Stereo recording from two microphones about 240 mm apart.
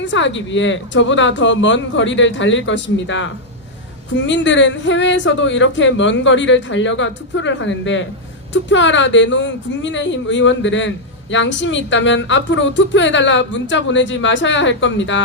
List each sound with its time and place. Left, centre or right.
0.0 s speech: left